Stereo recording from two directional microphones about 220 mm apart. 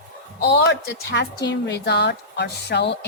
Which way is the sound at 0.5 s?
50° left (ahead or behind).